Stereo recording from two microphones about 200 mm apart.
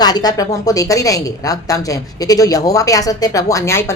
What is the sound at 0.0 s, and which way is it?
A woman's voice, 20° left (ahead or behind).